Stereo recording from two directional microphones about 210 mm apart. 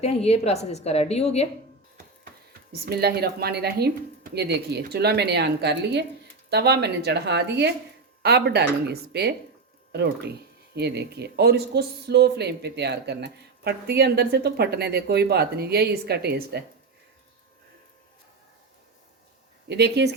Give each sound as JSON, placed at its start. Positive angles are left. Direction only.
{"t": 0.0, "sound": "a woman's voice", "side_deg": 30}
{"t": 2.8, "sound": "speech", "side_deg": -50}
{"t": 10.8, "sound": "speech", "side_deg": -50}
{"t": 19.6, "sound": "speech", "side_deg": -50}